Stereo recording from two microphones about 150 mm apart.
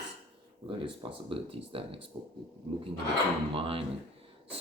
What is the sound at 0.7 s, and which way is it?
Speech, 35° right (ahead or behind).